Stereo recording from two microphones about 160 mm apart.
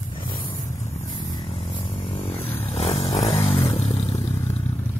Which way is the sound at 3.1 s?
25° left (ahead or behind).